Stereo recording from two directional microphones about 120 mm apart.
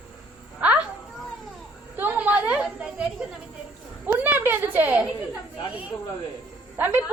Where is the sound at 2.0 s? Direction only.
15° right (ahead or behind).